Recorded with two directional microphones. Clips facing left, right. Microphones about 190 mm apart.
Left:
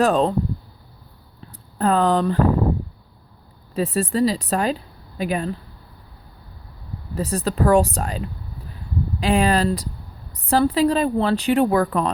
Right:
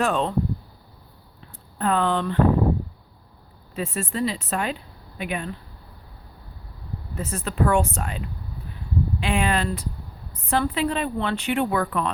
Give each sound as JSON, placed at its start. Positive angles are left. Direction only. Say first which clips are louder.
{"t": 0.0, "sound": "a woman's voice", "louder": "left 6 dB", "side_deg": 35}
{"t": 1.4, "sound": "a sound", "louder": "left 5 dB", "side_deg": 35}
{"t": 3.8, "sound": "a woman's voice", "louder": "left 7 dB", "side_deg": 35}
{"t": 7.2, "sound": "a woman's voice", "louder": "left 4 dB", "side_deg": 35}
{"t": 9.2, "sound": "a woman's voice", "louder": "left 7 dB", "side_deg": 35}